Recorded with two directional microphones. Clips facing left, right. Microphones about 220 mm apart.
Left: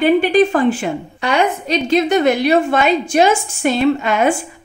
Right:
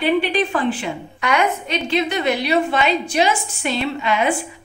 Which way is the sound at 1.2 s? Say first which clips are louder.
Left 2 dB; 30° left (ahead or behind).